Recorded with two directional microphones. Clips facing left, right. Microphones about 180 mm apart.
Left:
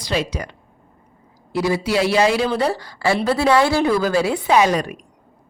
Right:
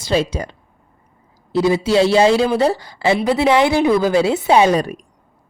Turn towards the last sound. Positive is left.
turn(degrees=-35)  # may be behind; listen again after turning